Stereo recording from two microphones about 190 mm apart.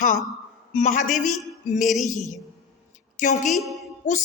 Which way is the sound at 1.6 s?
40° left (ahead or behind).